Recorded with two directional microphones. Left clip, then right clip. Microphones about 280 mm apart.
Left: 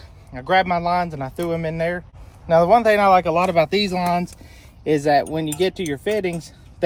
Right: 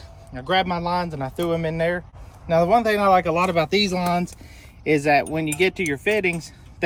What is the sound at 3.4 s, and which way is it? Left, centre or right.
Speech, centre.